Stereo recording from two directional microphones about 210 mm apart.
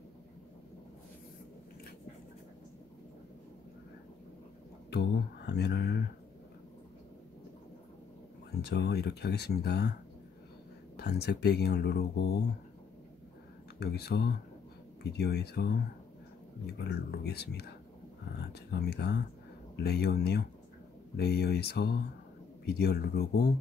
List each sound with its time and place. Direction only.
4.9 s a sound: 50° left (ahead or behind)
8.6 s speech: 50° left (ahead or behind)
11.0 s speech: 50° left (ahead or behind)
13.7 s speech: 50° left (ahead or behind)